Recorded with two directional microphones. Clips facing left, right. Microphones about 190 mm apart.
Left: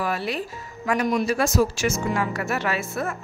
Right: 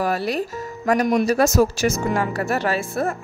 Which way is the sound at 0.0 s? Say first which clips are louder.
Right 4 dB; 40° right (ahead or behind).